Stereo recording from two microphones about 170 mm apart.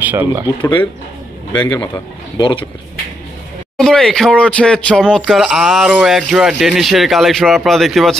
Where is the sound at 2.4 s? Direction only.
30° left (ahead or behind).